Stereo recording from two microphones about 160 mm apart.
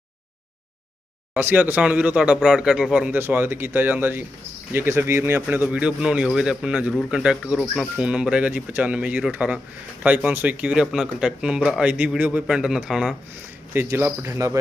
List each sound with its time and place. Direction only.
1.3 s speech: 10° right (ahead or behind)
13.7 s speech: 15° right (ahead or behind)